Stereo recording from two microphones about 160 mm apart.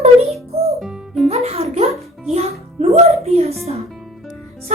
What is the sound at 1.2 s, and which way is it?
Music, 40° right (ahead or behind).